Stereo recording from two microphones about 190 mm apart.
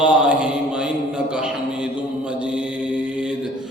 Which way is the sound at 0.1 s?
5° right (ahead or behind).